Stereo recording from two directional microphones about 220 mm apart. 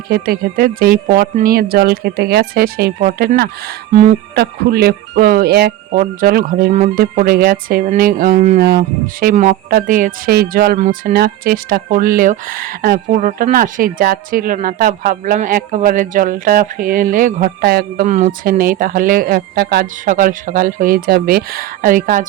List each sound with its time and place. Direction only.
0.1 s speech: 40° right (ahead or behind)